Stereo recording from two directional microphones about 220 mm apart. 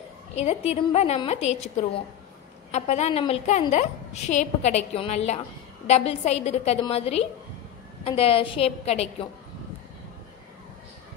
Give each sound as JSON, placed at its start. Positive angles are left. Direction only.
{"t": 0.4, "sound": "a woman's voice", "side_deg": 30}